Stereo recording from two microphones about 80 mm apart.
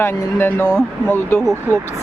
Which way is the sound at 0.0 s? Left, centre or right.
Left.